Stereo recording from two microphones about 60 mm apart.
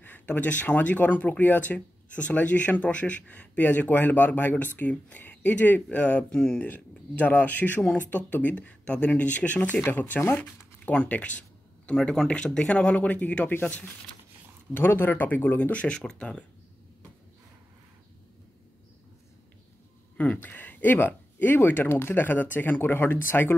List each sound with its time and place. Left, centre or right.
0.0 s speech: left
20.2 s speech: left